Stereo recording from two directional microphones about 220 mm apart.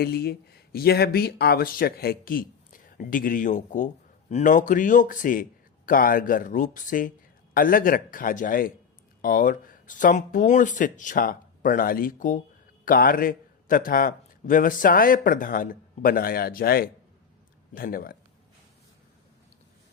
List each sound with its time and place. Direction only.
0.0 s speech: 45° left (ahead or behind)